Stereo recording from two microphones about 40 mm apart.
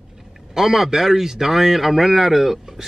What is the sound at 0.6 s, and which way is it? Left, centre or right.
A man's voice, centre.